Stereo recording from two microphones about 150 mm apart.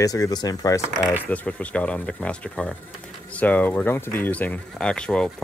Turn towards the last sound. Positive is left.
turn(degrees=5)  # may be behind; listen again after turning